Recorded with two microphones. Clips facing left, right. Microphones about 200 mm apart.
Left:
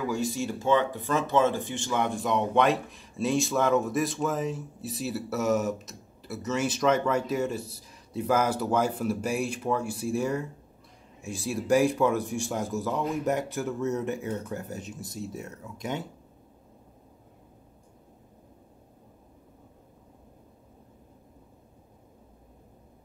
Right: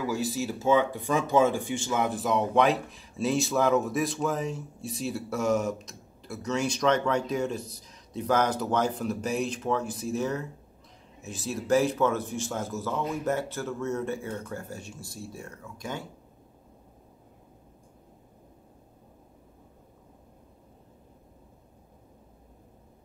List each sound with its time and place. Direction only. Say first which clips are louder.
0.0 s speech: even; centre (ahead or behind); by 16.1 s 20° left (ahead or behind)